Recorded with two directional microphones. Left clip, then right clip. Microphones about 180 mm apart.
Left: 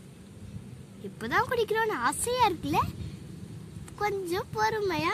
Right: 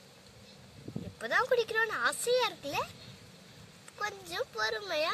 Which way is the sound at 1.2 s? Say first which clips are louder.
Left 2 dB; 45° left (ahead or behind).